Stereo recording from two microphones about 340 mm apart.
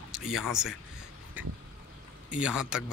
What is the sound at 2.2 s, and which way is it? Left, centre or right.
Speech, centre.